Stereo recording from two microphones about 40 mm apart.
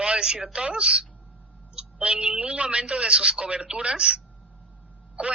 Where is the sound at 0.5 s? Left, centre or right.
Right.